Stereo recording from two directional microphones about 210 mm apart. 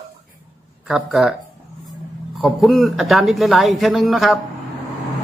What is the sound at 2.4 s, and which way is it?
A man's voice, centre (ahead or behind).